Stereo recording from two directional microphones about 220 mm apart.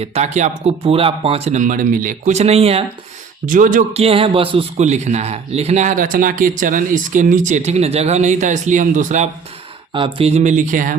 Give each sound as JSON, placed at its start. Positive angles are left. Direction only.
{"t": 0.0, "sound": "a man's voice", "side_deg": -30}